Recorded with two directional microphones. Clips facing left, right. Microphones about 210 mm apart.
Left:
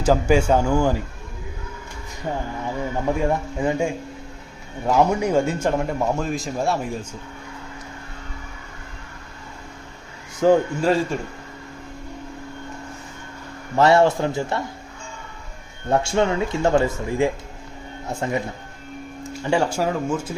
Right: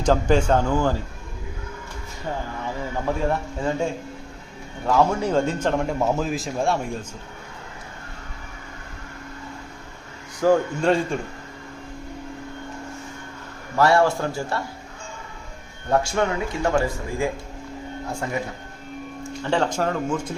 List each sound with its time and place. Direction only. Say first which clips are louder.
0.0 s speech: left 1 dB; 10° left (ahead or behind)
3.2 s speech: left 2 dB; 15° left (ahead or behind)
10.4 s speech: left 2 dB; 25° left (ahead or behind)
10.8 s speech: left 1 dB; 5° left (ahead or behind)
13.7 s speech: left 3 dB; 20° left (ahead or behind)
15.9 s speech: left 2 dB; 25° left (ahead or behind)
19.2 s speech: left 2 dB; 10° left (ahead or behind)